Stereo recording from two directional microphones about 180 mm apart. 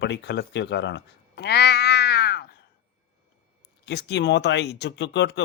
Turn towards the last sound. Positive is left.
turn(degrees=75)  # may be behind; listen again after turning